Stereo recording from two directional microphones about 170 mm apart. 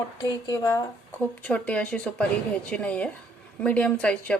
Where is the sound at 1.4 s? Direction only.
5° left (ahead or behind).